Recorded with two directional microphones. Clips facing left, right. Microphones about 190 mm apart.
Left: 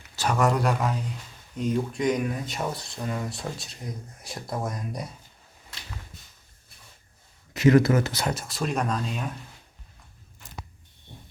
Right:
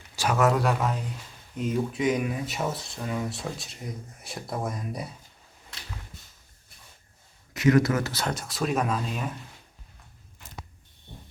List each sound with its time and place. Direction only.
0.2 s speech: 5° right (ahead or behind)
7.5 s a man's voice: 30° left (ahead or behind)
8.2 s speech: 5° left (ahead or behind)